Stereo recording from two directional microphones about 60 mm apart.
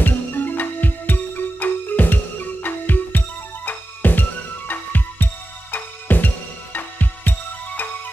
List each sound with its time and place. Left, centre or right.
0.0 s music: left